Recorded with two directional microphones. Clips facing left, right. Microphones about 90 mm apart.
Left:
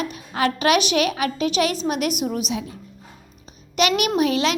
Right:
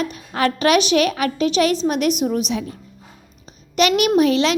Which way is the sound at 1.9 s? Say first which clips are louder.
Right 4 dB; 45° left (ahead or behind).